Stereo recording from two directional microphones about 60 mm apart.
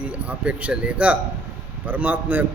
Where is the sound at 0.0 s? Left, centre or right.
Right.